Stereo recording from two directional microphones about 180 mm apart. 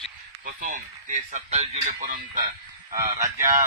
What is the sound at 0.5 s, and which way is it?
Speech, 45° right (ahead or behind).